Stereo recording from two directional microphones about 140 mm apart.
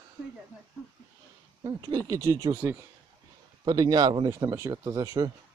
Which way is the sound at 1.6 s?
25° right (ahead or behind).